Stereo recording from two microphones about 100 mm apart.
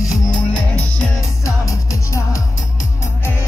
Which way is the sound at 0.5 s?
10° left (ahead or behind).